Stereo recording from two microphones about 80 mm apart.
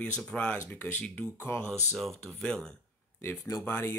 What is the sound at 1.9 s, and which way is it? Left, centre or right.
Speech, centre.